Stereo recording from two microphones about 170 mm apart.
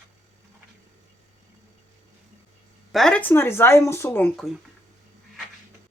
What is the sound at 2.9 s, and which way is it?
Speech, centre (ahead or behind).